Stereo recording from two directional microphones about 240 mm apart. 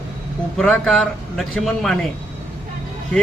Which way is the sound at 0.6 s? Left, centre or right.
Centre.